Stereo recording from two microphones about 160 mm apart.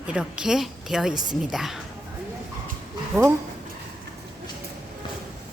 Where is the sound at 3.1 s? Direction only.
5° left (ahead or behind).